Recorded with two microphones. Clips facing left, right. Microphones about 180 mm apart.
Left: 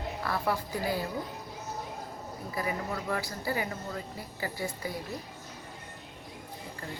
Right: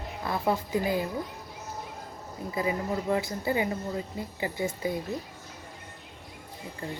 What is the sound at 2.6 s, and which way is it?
Speech, 20° right (ahead or behind).